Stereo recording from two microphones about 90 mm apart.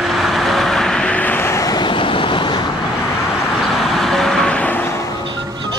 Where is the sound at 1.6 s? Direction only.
55° left (ahead or behind).